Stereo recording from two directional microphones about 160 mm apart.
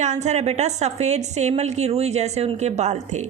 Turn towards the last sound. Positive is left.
turn(degrees=-45)  # may be behind; listen again after turning